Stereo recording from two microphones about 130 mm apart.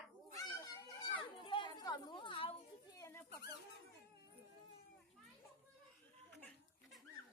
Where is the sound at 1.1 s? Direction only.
40° left (ahead or behind).